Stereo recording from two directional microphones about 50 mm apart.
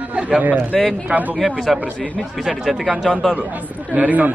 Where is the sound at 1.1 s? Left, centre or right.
Right.